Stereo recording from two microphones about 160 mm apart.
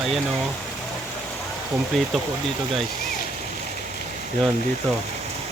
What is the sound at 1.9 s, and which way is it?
Speech, centre (ahead or behind).